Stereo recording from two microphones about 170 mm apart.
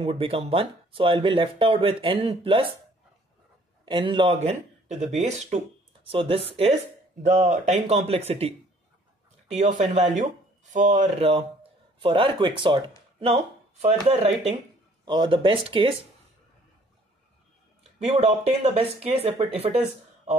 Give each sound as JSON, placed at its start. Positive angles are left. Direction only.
{"t": 0.0, "sound": "speech", "side_deg": -35}
{"t": 3.8, "sound": "speech", "side_deg": -30}
{"t": 7.2, "sound": "a man's voice", "side_deg": -45}
{"t": 17.9, "sound": "speech", "side_deg": -40}